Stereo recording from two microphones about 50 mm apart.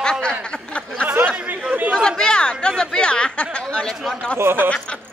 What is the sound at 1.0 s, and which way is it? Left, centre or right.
Chatter, right.